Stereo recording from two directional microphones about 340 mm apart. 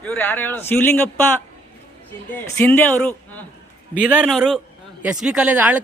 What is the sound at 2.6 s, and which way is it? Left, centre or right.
Speech, centre.